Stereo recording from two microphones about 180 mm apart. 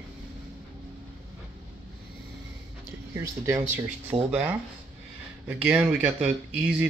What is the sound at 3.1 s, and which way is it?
Speech, 15° right (ahead or behind).